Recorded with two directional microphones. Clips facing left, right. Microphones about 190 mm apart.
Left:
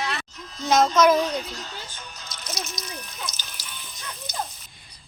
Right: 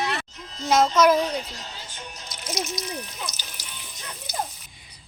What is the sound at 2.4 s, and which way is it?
Water, 15° right (ahead or behind).